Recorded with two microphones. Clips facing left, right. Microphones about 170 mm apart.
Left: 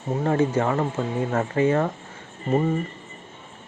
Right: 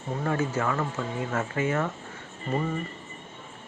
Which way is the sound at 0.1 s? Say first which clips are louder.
Left 6 dB; 30° left (ahead or behind).